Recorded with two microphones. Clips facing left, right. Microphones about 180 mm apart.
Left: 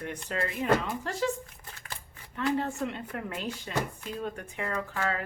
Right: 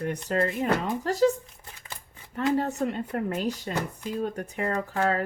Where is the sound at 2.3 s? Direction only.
40° right (ahead or behind).